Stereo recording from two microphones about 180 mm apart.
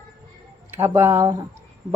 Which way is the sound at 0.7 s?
15° right (ahead or behind).